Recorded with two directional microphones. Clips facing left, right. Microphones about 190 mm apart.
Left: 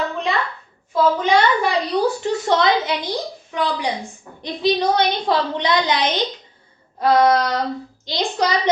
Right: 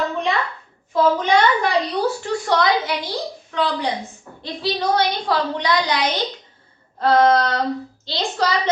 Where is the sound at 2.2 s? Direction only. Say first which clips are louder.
Left 1 dB; 20° left (ahead or behind).